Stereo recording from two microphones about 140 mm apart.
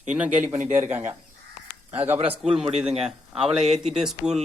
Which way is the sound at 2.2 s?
40° right (ahead or behind).